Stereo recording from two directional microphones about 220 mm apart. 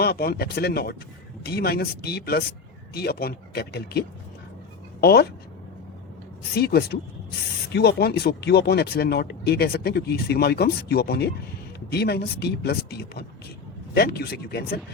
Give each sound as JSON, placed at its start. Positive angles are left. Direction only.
{"t": 0.0, "sound": "speech", "side_deg": 45}
{"t": 6.6, "sound": "speech", "side_deg": 45}